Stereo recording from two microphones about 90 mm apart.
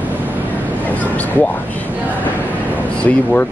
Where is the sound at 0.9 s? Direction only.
15° left (ahead or behind).